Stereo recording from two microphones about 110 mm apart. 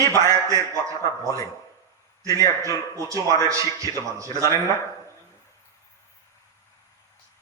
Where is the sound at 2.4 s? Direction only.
30° right (ahead or behind).